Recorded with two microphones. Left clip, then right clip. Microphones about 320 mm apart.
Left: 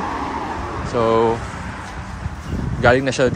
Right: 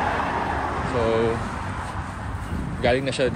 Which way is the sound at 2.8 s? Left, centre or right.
Left.